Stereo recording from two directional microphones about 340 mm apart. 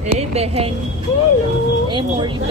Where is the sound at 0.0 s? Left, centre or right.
Centre.